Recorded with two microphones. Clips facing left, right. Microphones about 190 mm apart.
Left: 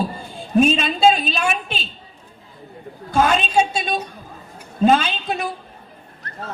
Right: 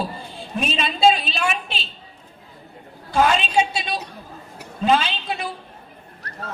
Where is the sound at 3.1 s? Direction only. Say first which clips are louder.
Left 1 dB; 45° left (ahead or behind).